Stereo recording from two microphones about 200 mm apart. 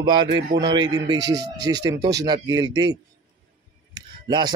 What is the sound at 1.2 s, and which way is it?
Speech, 60° right (ahead or behind).